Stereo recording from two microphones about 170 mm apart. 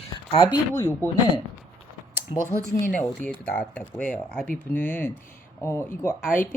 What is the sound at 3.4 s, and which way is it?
Speech, 10° left (ahead or behind).